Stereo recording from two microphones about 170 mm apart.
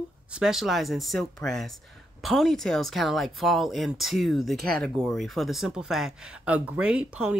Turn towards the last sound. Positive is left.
turn(degrees=-5)  # may be behind; listen again after turning